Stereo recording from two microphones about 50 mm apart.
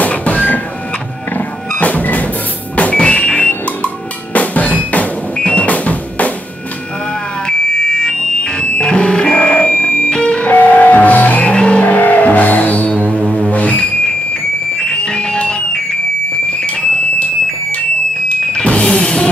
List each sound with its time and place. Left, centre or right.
0.0 s printer: left
1.8 s music: left
3.0 s drum: centre
7.4 s alarm: centre
10.5 s music: left; by 16.0 s centre
18.4 s music: left